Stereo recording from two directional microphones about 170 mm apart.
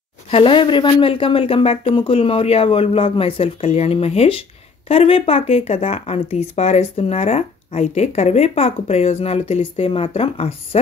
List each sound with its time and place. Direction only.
0.3 s speech: 30° left (ahead or behind)